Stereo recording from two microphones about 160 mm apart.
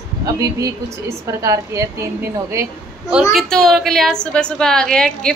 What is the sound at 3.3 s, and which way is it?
A woman's voice, centre (ahead or behind).